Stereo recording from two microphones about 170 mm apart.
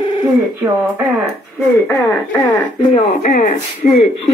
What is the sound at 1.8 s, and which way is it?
Speech, 10° left (ahead or behind).